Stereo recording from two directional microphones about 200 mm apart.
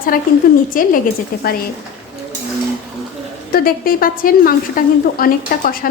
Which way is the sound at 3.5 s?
45° left (ahead or behind).